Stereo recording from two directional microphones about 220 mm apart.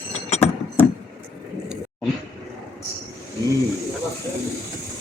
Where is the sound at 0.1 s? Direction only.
30° left (ahead or behind).